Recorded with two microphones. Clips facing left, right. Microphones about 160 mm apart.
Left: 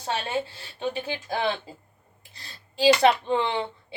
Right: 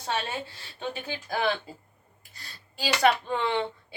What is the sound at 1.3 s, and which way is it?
Speech, 25° left (ahead or behind).